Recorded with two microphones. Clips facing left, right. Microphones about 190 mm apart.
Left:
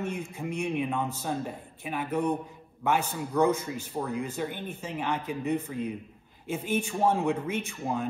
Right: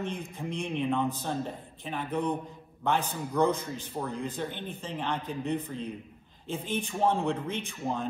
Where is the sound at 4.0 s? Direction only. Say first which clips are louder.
Left 2 dB; 5° left (ahead or behind).